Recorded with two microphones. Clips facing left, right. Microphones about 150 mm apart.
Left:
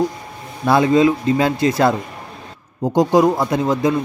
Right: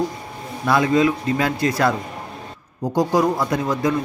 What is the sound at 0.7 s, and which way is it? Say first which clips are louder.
Speech: left 4 dB; 25° left (ahead or behind).